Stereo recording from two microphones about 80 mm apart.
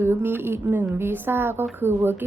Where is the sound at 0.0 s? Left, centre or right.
Right.